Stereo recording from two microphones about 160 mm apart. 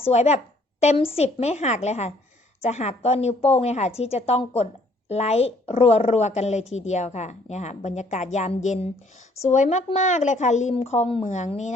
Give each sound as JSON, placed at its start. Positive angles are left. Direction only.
{"t": 0.1, "sound": "a woman's voice", "side_deg": 45}